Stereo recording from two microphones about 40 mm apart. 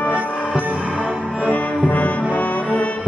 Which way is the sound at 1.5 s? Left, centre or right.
Left.